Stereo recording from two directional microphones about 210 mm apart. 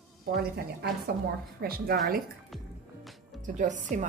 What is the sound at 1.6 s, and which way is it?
Speech, 45° right (ahead or behind).